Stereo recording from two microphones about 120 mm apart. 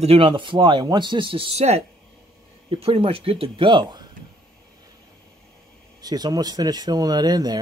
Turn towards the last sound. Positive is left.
turn(degrees=-35)  # may be behind; listen again after turning